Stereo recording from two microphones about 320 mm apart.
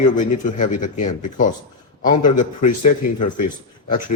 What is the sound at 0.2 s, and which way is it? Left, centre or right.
Speech, left.